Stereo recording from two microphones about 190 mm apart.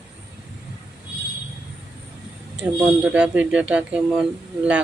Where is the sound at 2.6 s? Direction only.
10° right (ahead or behind).